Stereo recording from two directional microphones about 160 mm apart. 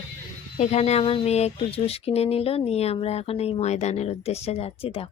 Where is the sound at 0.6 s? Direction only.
45° left (ahead or behind).